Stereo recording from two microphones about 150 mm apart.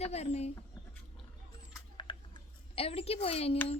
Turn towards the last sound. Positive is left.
turn(degrees=40)  # may be behind; listen again after turning